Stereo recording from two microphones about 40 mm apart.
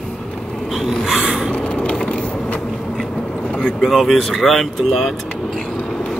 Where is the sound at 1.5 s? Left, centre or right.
Left.